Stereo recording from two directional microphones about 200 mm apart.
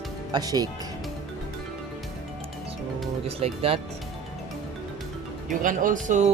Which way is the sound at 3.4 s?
30° right (ahead or behind).